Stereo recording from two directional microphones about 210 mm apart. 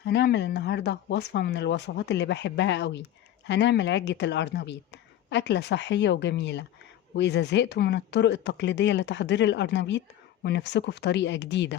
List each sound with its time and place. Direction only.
0.0 s speech: 55° left (ahead or behind)